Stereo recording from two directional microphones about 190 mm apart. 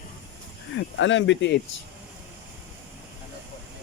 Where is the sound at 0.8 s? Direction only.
80° left.